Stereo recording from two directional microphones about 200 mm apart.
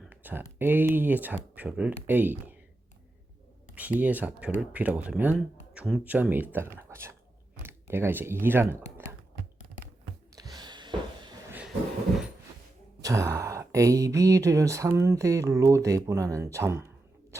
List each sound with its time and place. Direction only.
0.0 s speech: 10° right (ahead or behind)
3.8 s speech: 10° right (ahead or behind)
10.3 s a sound: 20° right (ahead or behind)
13.0 s speech: 15° right (ahead or behind)